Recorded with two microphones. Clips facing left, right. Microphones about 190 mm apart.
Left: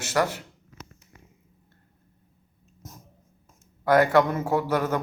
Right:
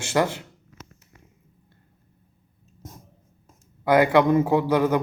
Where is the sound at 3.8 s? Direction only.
15° right (ahead or behind).